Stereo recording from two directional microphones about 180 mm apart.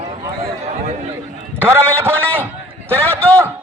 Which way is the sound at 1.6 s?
10° right (ahead or behind).